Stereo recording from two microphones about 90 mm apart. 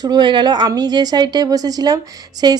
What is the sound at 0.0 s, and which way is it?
A woman's voice, 55° right (ahead or behind).